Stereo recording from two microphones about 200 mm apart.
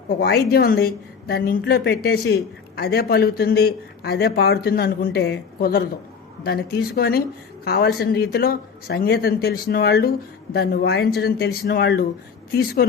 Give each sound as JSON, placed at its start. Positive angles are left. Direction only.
{"t": 0.2, "sound": "a woman's voice", "side_deg": 50}